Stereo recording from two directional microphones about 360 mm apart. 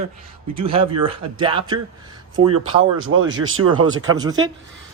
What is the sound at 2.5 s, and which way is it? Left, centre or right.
Speech, right.